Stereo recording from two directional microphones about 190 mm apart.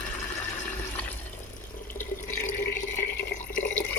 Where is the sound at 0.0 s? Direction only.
5° left (ahead or behind).